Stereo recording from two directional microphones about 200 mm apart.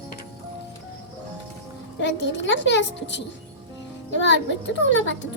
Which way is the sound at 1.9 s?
65° left (ahead or behind).